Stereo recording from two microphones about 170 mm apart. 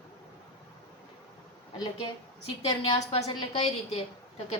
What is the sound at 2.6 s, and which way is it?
Speech, 35° left (ahead or behind).